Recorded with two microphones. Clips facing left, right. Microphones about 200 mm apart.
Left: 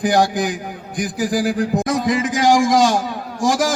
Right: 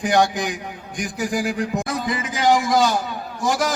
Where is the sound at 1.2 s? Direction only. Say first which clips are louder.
Left 4 dB; 35° left (ahead or behind).